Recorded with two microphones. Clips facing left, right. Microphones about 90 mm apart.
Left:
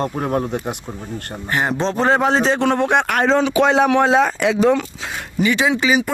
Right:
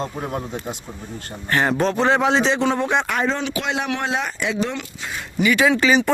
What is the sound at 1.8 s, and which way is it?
Speech, 35° left (ahead or behind).